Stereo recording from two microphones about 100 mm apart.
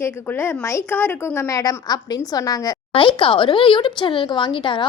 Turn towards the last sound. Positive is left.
turn(degrees=55)  # may be behind; listen again after turning